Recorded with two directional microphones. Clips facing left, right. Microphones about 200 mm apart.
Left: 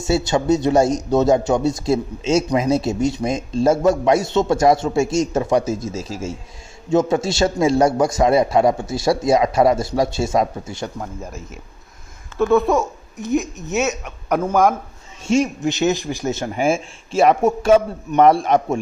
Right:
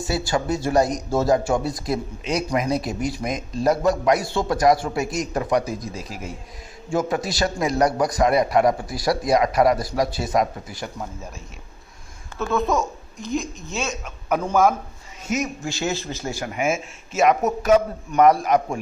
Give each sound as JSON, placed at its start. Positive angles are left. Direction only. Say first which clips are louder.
{"t": 0.0, "sound": "speech", "louder": "left 5 dB", "side_deg": 25}
{"t": 12.4, "sound": "a man's voice", "louder": "left 8 dB", "side_deg": 15}
{"t": 12.6, "sound": "speech", "louder": "left 4 dB", "side_deg": 0}
{"t": 13.7, "sound": "speech", "louder": "left 8 dB", "side_deg": 70}
{"t": 14.0, "sound": "a man's voice", "louder": "left 3 dB", "side_deg": 10}
{"t": 15.2, "sound": "speech", "louder": "left 8 dB", "side_deg": 30}